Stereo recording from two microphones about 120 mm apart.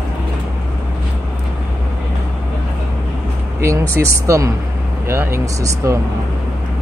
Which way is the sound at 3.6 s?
25° right (ahead or behind).